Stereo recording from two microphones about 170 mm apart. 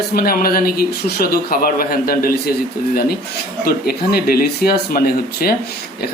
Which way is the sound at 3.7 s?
65° left (ahead or behind).